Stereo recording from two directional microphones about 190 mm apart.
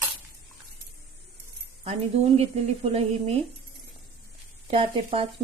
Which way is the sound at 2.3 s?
35° right (ahead or behind).